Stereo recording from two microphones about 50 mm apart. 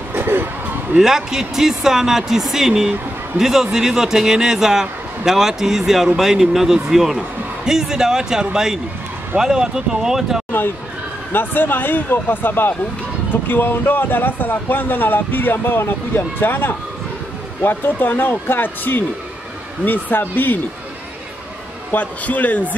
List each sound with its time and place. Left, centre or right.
0.1 s a sound: right
1.0 s a man's voice: centre
11.3 s a man's voice: left
21.9 s a man's voice: left